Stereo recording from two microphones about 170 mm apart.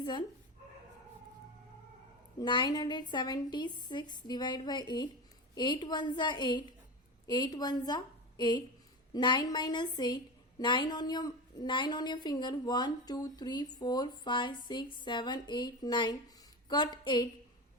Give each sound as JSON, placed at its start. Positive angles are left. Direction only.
{"t": 0.0, "sound": "speech", "side_deg": 25}
{"t": 2.4, "sound": "a woman's voice", "side_deg": 25}